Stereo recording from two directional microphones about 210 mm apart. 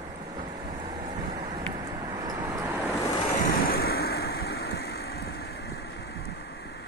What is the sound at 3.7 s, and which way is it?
Vehicle, 50° left (ahead or behind).